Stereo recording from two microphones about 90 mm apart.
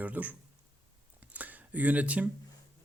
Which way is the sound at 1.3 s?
20° right (ahead or behind).